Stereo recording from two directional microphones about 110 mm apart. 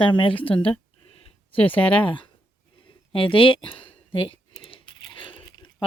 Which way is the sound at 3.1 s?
55° left (ahead or behind).